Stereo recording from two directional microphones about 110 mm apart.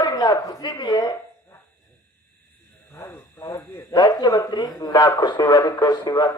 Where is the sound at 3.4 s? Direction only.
40° left (ahead or behind).